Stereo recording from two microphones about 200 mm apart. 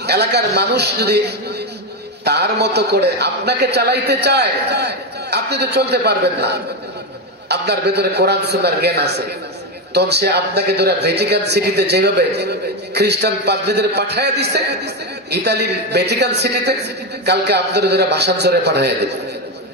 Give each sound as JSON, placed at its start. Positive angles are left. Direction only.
{"t": 0.0, "sound": "a man's voice", "side_deg": -55}